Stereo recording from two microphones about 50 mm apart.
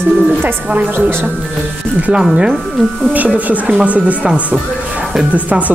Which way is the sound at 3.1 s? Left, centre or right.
Right.